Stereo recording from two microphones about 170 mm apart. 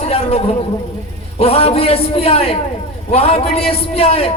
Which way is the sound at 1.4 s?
35° left (ahead or behind).